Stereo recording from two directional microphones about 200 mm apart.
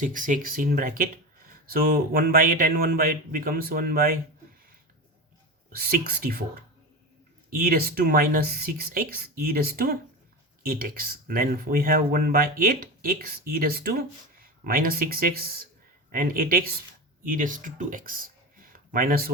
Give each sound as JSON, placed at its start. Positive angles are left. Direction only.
{"t": 0.0, "sound": "speech", "side_deg": -40}
{"t": 5.7, "sound": "speech", "side_deg": -45}
{"t": 7.5, "sound": "speech", "side_deg": -45}